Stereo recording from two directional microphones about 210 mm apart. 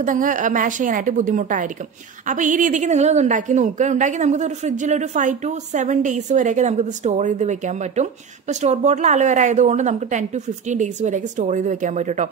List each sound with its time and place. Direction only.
0.0 s a woman's voice: 40° right (ahead or behind)